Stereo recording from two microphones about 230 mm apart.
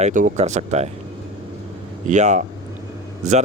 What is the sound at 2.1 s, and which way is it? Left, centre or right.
Speech, right.